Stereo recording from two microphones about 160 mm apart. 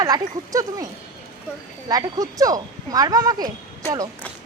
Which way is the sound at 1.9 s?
20° right (ahead or behind).